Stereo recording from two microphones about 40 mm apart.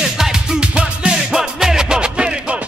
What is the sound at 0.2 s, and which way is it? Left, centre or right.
Music, centre.